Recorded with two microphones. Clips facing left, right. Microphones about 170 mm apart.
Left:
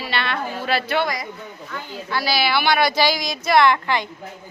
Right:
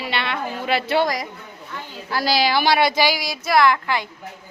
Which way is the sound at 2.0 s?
35° right (ahead or behind).